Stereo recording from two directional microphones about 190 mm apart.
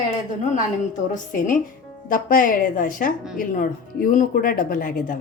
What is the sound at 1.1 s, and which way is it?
A woman's voice, 45° left (ahead or behind).